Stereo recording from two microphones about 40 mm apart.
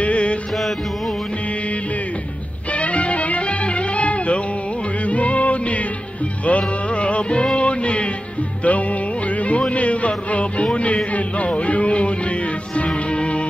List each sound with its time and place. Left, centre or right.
0.0 s music: left
2.7 s music: left